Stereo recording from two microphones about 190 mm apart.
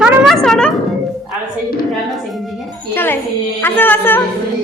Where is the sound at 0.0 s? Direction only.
Centre (ahead or behind).